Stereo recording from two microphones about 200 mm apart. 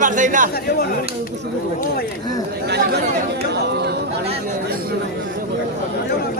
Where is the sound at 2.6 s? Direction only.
55° right (ahead or behind).